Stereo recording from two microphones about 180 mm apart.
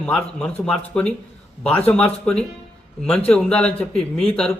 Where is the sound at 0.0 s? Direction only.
5° left (ahead or behind).